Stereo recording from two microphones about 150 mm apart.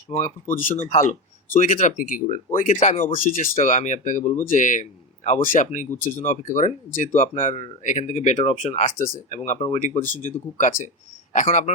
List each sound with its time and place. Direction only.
0.1 s speech: 50° left (ahead or behind)
3.2 s speech: 65° left (ahead or behind)
3.6 s speech: 50° left (ahead or behind)